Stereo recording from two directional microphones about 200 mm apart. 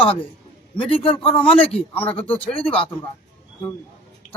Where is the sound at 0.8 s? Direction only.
25° left (ahead or behind).